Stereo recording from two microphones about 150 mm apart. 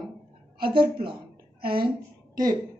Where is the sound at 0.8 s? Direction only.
90° right.